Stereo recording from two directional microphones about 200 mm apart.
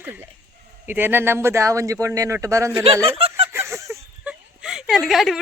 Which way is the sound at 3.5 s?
15° right (ahead or behind).